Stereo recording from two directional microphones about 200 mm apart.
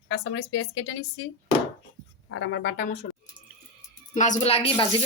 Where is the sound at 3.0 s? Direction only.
45° left (ahead or behind).